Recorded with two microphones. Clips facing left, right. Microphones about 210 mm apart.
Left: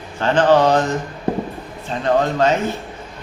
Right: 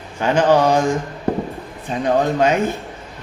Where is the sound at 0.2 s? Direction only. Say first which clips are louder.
Left 1 dB; 10° right (ahead or behind).